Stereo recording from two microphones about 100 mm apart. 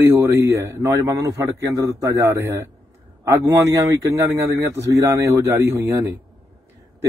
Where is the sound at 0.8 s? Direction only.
35° right (ahead or behind).